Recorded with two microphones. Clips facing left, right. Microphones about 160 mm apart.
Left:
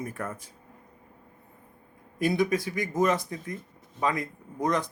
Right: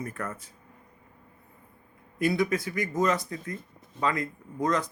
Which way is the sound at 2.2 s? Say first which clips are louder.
Left 1 dB; 20° left (ahead or behind).